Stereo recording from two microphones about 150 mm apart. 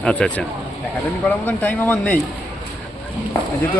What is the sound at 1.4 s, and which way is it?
Speech, 10° left (ahead or behind).